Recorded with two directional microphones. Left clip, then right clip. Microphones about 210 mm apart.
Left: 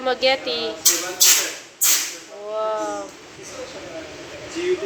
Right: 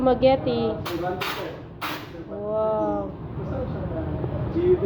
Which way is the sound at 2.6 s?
30° left (ahead or behind).